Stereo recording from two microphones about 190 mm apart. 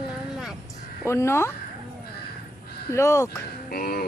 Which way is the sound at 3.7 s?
50° left (ahead or behind).